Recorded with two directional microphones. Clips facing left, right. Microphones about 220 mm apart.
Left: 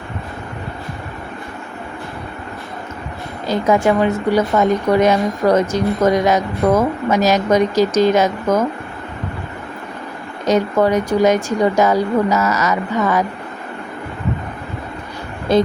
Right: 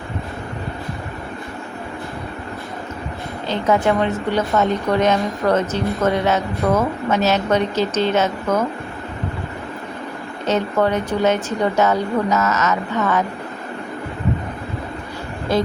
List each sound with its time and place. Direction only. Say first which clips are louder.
3.4 s a woman's voice: left 3 dB; 10° left (ahead or behind)
10.4 s a woman's voice: left 4 dB; 10° left (ahead or behind)
15.5 s speech: left 5 dB; 20° left (ahead or behind)